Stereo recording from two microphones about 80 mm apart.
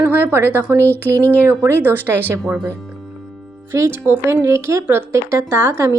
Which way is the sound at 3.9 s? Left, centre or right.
Right.